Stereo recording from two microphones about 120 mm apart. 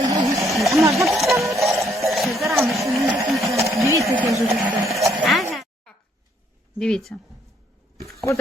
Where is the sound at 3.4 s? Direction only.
25° right (ahead or behind).